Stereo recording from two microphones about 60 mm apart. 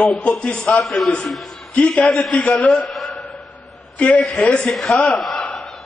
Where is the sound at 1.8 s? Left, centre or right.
Centre.